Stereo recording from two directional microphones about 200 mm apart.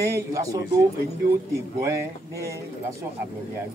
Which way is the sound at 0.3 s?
15° right (ahead or behind).